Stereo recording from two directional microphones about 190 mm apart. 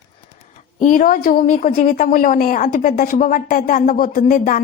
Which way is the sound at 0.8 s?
45° left (ahead or behind).